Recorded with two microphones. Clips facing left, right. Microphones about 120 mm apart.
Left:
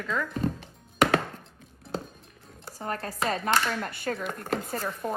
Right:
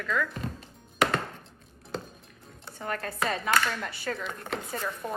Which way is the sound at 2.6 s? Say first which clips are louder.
Left 1 dB; 35° left (ahead or behind).